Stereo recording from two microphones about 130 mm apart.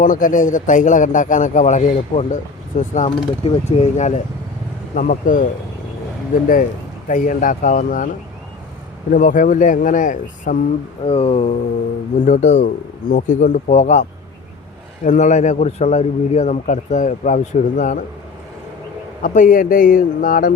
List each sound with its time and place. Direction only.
0.0 s speech: 90° left; by 3.1 s 70° left (ahead or behind)
3.4 s a man's voice: 50° left (ahead or behind)
4.9 s a man's voice: 90° left
7.1 s speech: 85° left
11.0 s a man's voice: 50° left (ahead or behind); by 18.0 s 70° left (ahead or behind)
19.2 s a man's voice: 85° left